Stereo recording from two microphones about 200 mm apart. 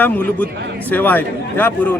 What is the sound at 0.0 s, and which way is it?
A man's voice, 10° left (ahead or behind).